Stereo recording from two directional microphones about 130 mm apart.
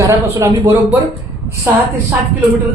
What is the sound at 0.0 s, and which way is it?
A woman's voice, 25° right (ahead or behind).